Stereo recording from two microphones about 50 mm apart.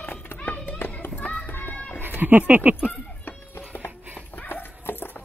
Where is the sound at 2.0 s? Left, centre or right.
Right.